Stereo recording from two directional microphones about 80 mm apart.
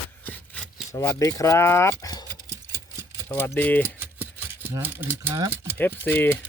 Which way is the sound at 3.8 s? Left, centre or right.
Right.